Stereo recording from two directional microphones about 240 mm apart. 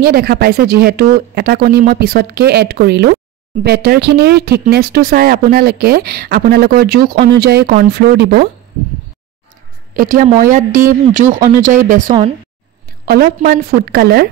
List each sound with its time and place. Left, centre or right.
0.0 s speech: right
9.9 s speech: right